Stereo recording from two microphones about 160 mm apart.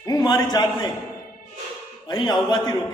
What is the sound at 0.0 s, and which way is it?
Speech, 25° left (ahead or behind).